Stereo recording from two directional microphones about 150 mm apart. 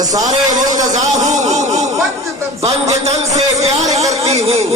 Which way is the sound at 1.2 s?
50° right (ahead or behind).